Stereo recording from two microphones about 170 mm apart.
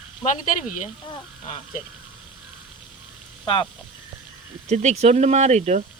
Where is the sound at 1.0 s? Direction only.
35° left (ahead or behind).